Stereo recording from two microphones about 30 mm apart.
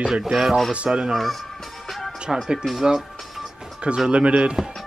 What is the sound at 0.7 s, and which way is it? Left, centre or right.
Speech, right.